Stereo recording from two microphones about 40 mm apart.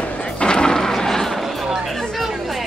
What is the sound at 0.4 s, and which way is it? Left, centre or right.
Artillery fire, left.